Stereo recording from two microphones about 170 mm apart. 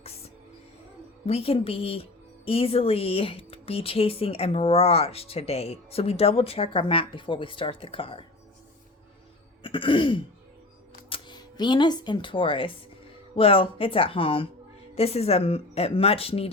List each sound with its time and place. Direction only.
1.3 s a woman's voice: 35° left (ahead or behind)
9.6 s throat clearing: 30° left (ahead or behind)
11.1 s a woman's voice: 25° left (ahead or behind)